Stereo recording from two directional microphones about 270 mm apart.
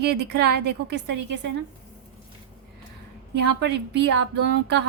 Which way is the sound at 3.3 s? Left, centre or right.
Right.